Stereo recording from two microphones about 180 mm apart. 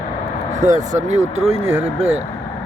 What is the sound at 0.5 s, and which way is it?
Speech, 45° right (ahead or behind).